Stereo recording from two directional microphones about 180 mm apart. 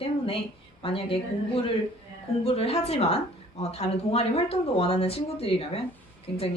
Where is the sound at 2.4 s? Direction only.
35° left (ahead or behind).